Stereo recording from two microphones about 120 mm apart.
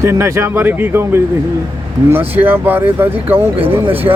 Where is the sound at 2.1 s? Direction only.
15° right (ahead or behind).